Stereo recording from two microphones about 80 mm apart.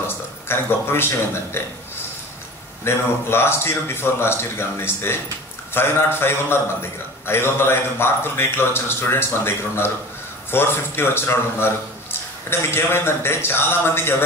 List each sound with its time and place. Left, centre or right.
0.0 s speech: left
2.8 s a man's voice: left